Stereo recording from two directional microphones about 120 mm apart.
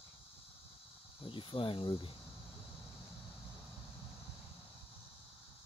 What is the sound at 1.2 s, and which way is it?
Cricket, 45° left (ahead or behind).